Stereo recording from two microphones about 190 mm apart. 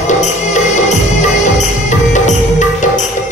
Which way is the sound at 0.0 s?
40° left (ahead or behind).